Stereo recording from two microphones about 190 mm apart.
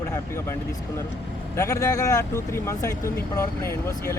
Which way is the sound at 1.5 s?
15° left (ahead or behind).